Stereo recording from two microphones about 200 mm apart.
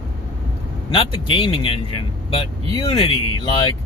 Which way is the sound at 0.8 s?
25° left (ahead or behind).